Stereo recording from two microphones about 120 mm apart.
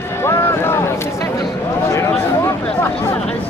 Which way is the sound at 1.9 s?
25° left (ahead or behind).